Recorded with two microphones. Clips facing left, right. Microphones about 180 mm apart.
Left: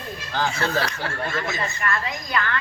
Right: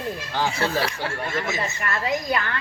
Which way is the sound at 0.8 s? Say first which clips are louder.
Even; 25° right (ahead or behind).